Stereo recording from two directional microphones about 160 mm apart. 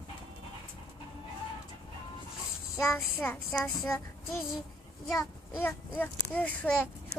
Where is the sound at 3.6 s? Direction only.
Centre (ahead or behind).